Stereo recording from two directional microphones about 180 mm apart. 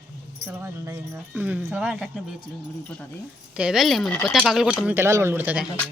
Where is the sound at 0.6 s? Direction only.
15° right (ahead or behind).